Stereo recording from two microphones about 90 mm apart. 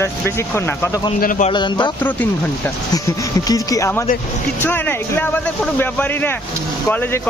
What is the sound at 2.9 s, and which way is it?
Speech, 45° left (ahead or behind).